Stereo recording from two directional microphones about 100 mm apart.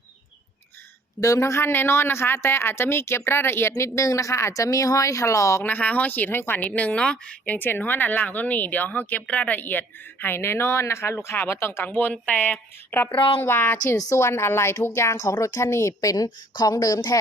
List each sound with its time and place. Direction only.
1.2 s a woman's voice: 30° left (ahead or behind)
5.6 s a woman's voice: 15° left (ahead or behind)
13.1 s speech: 60° left (ahead or behind)
13.4 s a woman's voice: 20° left (ahead or behind); by 17.2 s 40° left (ahead or behind)